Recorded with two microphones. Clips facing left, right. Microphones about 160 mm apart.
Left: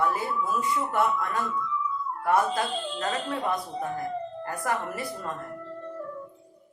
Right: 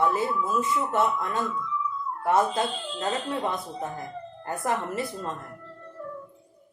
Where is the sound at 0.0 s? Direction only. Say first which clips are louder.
Right 2 dB; 25° right (ahead or behind).